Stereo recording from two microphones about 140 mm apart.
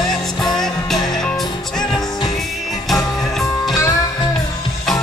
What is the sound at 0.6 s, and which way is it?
Music, 5° left (ahead or behind).